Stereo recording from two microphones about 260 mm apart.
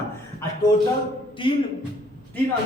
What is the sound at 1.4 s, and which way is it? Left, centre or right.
Speech, centre.